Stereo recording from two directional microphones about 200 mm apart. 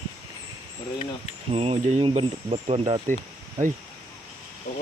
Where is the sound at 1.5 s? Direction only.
30° right (ahead or behind).